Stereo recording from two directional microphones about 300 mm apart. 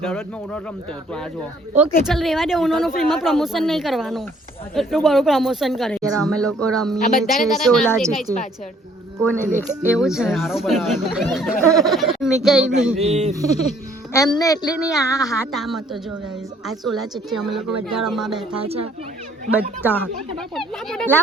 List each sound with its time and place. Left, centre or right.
0.0 s a woman's voice: centre
9.6 s a woman's voice: centre
13.0 s speech: right
13.4 s music: left
14.1 s speech: centre
15.5 s a woman's voice: centre
19.8 s a woman's voice: centre